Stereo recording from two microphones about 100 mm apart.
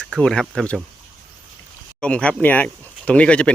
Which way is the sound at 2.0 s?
10° left (ahead or behind).